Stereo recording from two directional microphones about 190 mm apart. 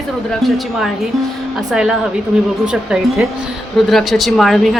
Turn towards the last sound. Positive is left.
turn(degrees=0)  # may be behind; listen again after turning